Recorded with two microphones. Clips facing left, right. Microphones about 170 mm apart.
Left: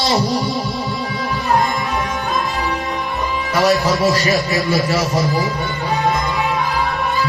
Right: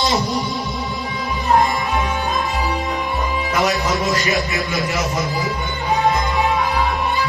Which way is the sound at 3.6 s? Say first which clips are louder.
Left 7 dB; 35° left (ahead or behind).